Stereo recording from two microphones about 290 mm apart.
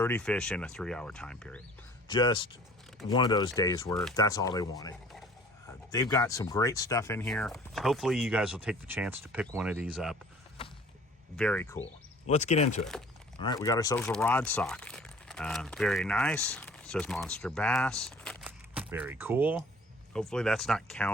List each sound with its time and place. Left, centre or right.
0.0 s speech: centre
2.0 s speech: centre
3.9 s speech: centre
4.2 s speech: centre
11.3 s speech: centre
12.3 s speech: left
13.4 s speech: centre